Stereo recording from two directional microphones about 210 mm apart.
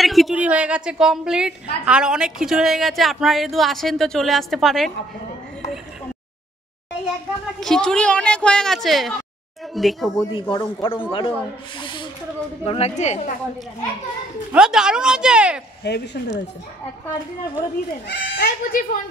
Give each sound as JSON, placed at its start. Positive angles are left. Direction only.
{"t": 0.0, "sound": "a woman's voice", "side_deg": 0}
{"t": 7.6, "sound": "a woman's voice", "side_deg": 5}
{"t": 10.5, "sound": "a man's voice", "side_deg": 20}
{"t": 14.5, "sound": "a woman's voice", "side_deg": -5}
{"t": 15.8, "sound": "speech", "side_deg": 55}
{"t": 18.0, "sound": "speech", "side_deg": 55}